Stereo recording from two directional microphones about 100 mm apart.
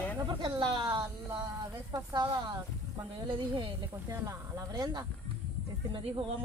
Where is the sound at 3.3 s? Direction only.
55° right (ahead or behind).